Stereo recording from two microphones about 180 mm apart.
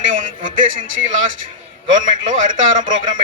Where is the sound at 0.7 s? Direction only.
90° right.